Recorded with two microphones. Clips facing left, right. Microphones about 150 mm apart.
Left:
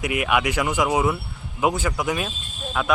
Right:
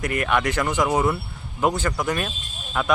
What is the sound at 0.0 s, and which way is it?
A man's voice, 10° left (ahead or behind).